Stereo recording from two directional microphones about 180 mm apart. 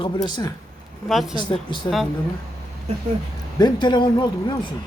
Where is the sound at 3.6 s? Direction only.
25° left (ahead or behind).